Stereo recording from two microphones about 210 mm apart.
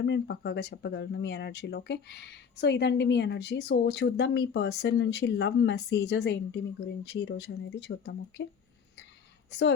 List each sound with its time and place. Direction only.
0.0 s speech: 50° left (ahead or behind)
9.5 s a woman's voice: 55° left (ahead or behind)